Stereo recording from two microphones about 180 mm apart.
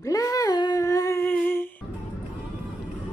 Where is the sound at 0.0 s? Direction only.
20° left (ahead or behind).